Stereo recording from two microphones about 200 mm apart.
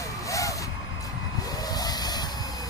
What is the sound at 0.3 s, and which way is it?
Vehicle, 15° left (ahead or behind).